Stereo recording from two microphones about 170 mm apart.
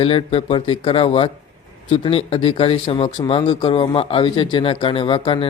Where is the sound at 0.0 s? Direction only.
35° left (ahead or behind).